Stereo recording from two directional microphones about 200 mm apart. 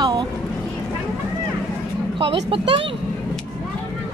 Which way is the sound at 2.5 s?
25° right (ahead or behind).